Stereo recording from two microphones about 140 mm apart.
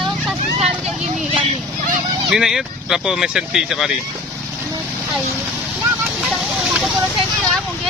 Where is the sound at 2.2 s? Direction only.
Centre (ahead or behind).